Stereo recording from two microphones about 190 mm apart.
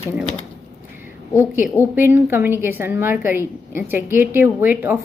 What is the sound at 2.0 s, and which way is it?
A woman's voice, 10° right (ahead or behind).